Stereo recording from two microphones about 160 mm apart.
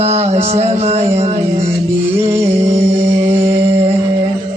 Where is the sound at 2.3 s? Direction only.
15° right (ahead or behind).